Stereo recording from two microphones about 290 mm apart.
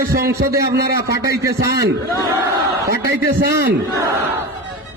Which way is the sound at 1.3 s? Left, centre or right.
Centre.